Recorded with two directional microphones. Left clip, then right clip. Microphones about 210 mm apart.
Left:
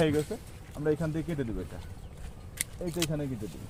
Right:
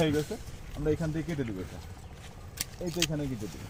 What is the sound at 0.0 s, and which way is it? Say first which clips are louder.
Speech: left 1 dB; 5° right (ahead or behind).